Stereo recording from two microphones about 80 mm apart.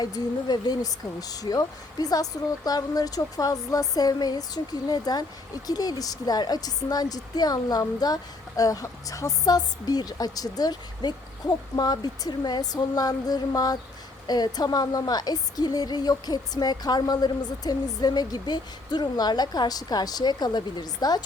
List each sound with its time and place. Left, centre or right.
0.0 s a woman's voice: left